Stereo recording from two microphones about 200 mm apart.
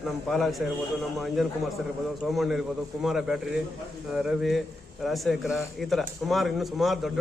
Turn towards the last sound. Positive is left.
turn(degrees=0)  # may be behind; listen again after turning